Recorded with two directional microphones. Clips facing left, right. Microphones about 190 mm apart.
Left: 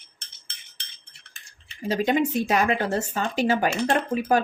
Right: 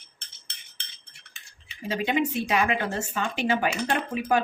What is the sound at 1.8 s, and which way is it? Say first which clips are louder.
Speech: left 3 dB; 40° left (ahead or behind).